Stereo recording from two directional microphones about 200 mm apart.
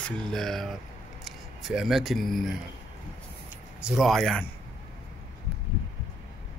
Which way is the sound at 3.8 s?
Centre (ahead or behind).